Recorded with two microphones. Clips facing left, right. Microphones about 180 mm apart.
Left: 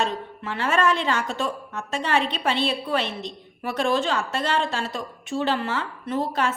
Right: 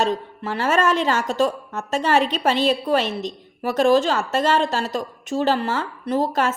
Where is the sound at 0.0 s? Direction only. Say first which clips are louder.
Right 5 dB; 40° right (ahead or behind).